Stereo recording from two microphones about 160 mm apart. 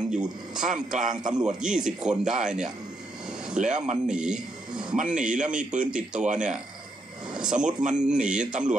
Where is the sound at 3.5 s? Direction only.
50° right (ahead or behind).